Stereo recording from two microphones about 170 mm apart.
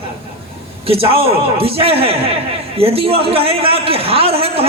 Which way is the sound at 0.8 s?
35° right (ahead or behind).